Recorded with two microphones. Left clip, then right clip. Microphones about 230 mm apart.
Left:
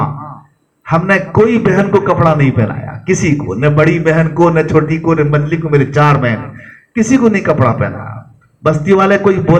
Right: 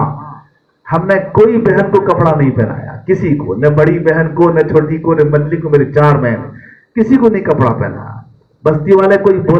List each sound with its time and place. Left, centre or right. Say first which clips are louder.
0.9 s a man's voice: even; left